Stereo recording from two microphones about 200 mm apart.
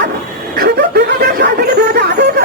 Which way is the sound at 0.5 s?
50° right (ahead or behind).